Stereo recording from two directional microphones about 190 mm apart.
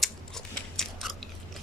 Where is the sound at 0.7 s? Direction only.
Centre (ahead or behind).